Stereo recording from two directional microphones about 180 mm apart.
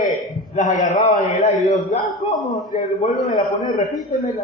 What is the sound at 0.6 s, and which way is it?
A man's voice, 45° left (ahead or behind).